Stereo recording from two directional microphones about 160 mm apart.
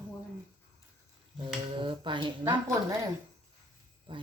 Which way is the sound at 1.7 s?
30° right (ahead or behind).